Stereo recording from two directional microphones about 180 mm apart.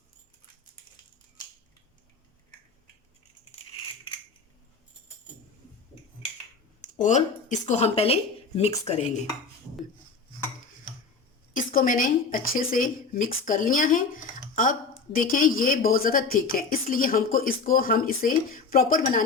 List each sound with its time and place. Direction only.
7.0 s speech: 45° left (ahead or behind)
11.5 s a woman's voice: 50° left (ahead or behind)